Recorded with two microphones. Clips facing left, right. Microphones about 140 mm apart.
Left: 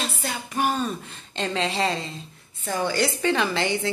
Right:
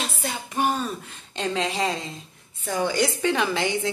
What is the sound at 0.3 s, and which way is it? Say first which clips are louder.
Music: right 1 dB; 25° right (ahead or behind).